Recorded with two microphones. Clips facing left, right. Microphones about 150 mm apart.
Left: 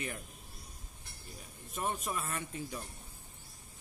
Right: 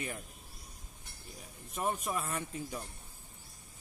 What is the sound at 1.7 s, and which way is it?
Speech, centre (ahead or behind).